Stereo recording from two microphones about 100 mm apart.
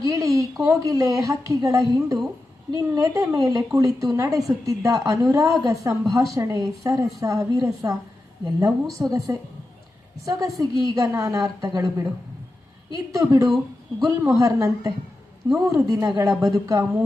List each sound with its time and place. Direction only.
0.0 s a woman's voice: 35° right (ahead or behind)